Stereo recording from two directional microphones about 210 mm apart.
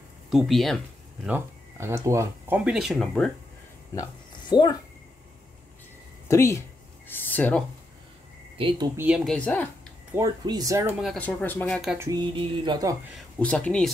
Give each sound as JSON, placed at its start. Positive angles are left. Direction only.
{"t": 0.3, "sound": "speech", "side_deg": 0}
{"t": 1.2, "sound": "speech", "side_deg": -10}
{"t": 3.9, "sound": "a sound", "side_deg": 20}
{"t": 6.2, "sound": "speech", "side_deg": 15}
{"t": 8.5, "sound": "a sound", "side_deg": -25}
{"t": 8.9, "sound": "speech", "side_deg": -5}
{"t": 10.1, "sound": "speech", "side_deg": -15}
{"t": 11.0, "sound": "speech", "side_deg": 5}
{"t": 12.0, "sound": "a sound", "side_deg": -20}
{"t": 13.4, "sound": "speech", "side_deg": 5}